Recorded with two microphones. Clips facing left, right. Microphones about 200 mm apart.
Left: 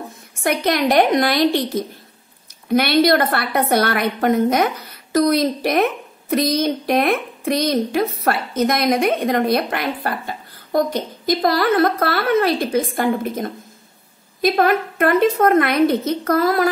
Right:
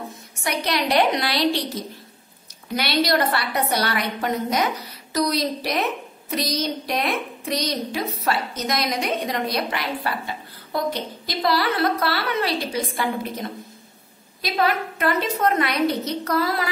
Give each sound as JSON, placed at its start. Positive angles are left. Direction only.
{"t": 0.4, "sound": "a woman's voice", "side_deg": 50}